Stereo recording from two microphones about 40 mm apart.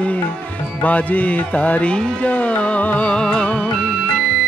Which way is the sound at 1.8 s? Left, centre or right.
Left.